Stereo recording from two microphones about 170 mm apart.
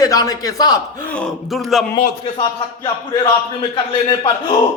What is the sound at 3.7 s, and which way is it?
Speech, 30° left (ahead or behind).